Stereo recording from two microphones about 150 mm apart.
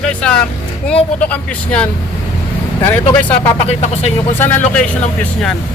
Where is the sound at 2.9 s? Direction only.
15° left (ahead or behind).